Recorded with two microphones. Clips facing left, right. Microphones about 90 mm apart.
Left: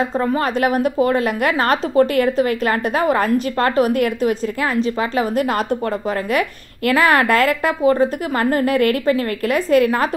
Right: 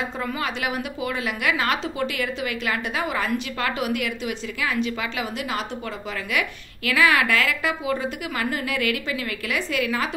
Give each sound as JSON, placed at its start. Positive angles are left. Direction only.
{"t": 0.2, "sound": "a woman's voice", "side_deg": 40}